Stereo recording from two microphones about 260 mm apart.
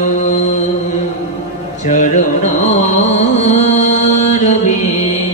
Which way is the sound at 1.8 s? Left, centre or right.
Left.